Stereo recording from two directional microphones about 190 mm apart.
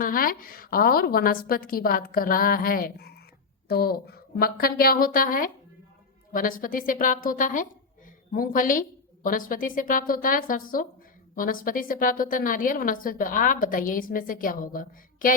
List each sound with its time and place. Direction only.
0.0 s a woman's voice: 45° left (ahead or behind)